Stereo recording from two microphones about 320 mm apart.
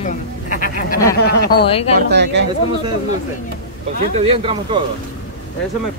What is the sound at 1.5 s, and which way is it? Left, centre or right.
Speech, centre.